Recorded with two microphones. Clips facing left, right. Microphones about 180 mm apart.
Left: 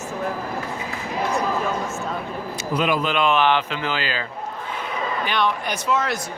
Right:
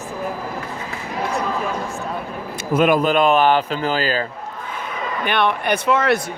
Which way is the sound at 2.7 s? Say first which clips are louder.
Right 6 dB; 50° right (ahead or behind).